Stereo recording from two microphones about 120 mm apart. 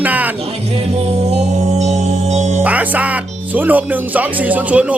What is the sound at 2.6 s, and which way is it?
Speech, 10° right (ahead or behind).